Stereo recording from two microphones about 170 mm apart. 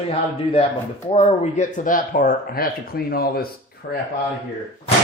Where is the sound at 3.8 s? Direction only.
75° left (ahead or behind).